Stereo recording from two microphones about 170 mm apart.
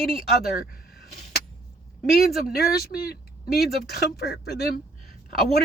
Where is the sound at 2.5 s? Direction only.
65° left (ahead or behind).